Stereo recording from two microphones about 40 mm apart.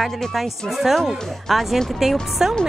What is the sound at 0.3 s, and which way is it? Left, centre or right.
A woman's voice, centre.